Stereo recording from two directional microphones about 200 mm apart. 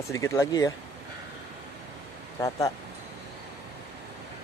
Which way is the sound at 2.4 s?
15° left (ahead or behind).